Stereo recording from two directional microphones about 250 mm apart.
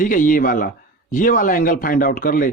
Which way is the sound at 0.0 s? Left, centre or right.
Left.